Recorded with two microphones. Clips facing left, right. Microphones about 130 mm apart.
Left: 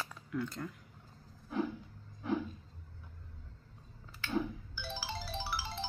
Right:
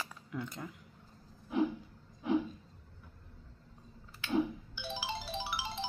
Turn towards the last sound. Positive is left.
turn(degrees=-15)  # may be behind; listen again after turning